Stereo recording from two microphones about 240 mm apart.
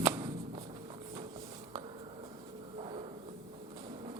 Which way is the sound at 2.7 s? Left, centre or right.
Right.